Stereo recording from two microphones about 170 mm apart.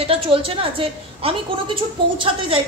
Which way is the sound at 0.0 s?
30° right (ahead or behind).